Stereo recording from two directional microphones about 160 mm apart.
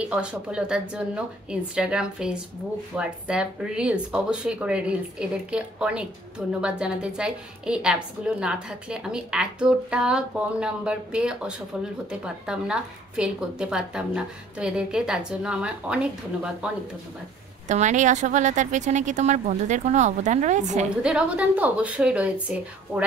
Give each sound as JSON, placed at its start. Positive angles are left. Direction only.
{"t": 0.0, "sound": "a woman's voice", "side_deg": -5}
{"t": 17.6, "sound": "speech", "side_deg": -50}
{"t": 21.0, "sound": "speech", "side_deg": -5}